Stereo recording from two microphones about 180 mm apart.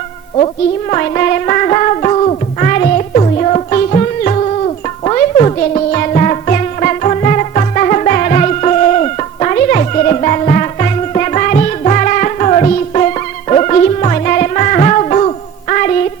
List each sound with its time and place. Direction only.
0.3 s music: 35° left (ahead or behind)
2.6 s music: 45° left (ahead or behind)
3.2 s music: 35° left (ahead or behind)